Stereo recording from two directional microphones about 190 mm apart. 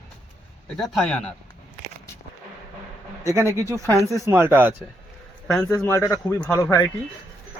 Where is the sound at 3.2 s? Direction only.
15° right (ahead or behind).